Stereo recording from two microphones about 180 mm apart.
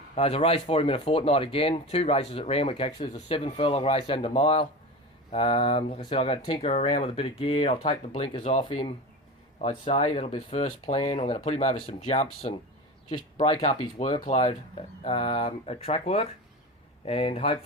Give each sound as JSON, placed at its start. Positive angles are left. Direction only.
{"t": 0.2, "sound": "speech", "side_deg": 35}